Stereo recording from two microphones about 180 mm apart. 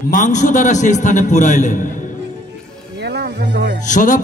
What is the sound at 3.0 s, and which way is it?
Music, 65° right (ahead or behind).